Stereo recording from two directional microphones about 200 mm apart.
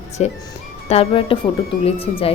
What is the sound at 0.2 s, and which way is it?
Speech, 35° left (ahead or behind).